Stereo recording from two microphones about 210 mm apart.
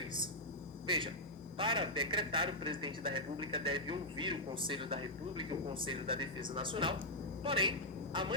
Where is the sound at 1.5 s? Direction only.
25° right (ahead or behind).